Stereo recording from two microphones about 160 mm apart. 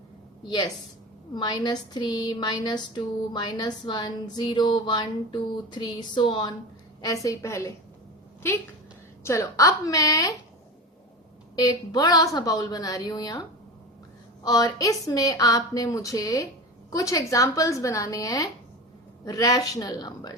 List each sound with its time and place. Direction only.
1.3 s a woman's voice: 25° left (ahead or behind)
9.2 s a woman's voice: 20° left (ahead or behind)
11.5 s a woman's voice: 25° left (ahead or behind)
14.4 s a woman's voice: 25° left (ahead or behind)